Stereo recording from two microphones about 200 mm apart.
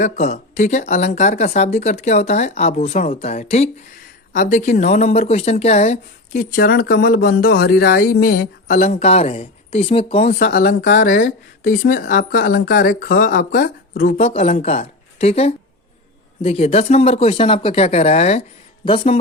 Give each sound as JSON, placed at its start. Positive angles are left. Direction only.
{"t": 0.0, "sound": "speech", "side_deg": 35}